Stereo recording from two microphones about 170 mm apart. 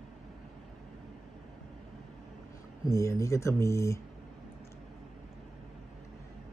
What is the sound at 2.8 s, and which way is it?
Speech, 20° left (ahead or behind).